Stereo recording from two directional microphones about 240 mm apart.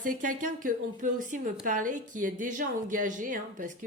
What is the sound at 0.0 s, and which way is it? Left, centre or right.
A woman's voice, right.